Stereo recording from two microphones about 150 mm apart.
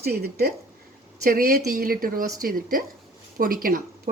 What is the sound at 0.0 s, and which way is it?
Speech, 90° right.